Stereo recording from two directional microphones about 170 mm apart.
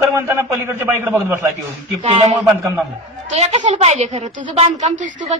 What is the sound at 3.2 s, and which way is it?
A woman's voice, 45° right (ahead or behind).